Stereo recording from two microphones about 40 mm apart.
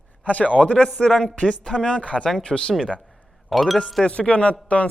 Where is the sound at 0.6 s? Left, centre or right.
Left.